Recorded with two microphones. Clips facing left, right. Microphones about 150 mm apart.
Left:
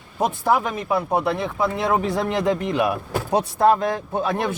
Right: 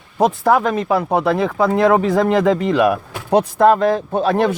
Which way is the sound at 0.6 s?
90° right.